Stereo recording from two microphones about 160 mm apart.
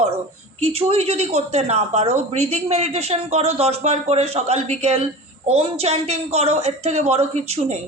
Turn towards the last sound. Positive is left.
turn(degrees=-40)  # may be behind; listen again after turning